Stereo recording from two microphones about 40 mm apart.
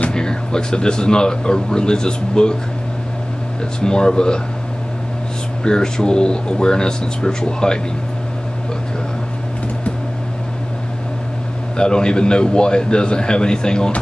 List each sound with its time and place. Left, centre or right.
0.1 s speech: centre
3.8 s speech: centre
5.6 s speech: centre
11.7 s speech: centre